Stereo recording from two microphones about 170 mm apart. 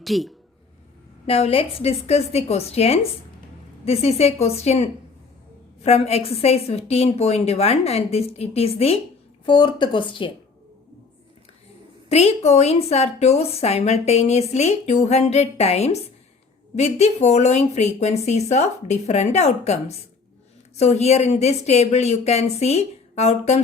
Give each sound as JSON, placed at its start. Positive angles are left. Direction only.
{"t": 0.0, "sound": "speech", "side_deg": 0}
{"t": 1.3, "sound": "a woman's voice", "side_deg": 35}
{"t": 12.0, "sound": "a woman's voice", "side_deg": 40}